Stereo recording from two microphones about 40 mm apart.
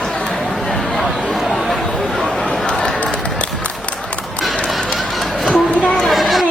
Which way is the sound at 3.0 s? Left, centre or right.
Left.